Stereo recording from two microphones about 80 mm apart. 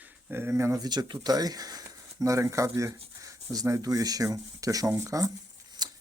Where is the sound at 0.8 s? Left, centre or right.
Right.